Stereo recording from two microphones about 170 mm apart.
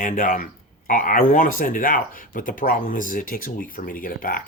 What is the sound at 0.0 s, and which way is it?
Speech, 50° left (ahead or behind).